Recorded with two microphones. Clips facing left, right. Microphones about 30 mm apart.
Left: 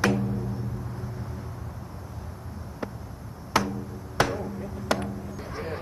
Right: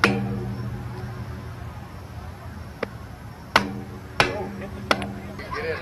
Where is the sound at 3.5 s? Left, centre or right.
Right.